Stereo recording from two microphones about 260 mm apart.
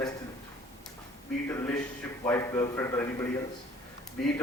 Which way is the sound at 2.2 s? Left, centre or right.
Centre.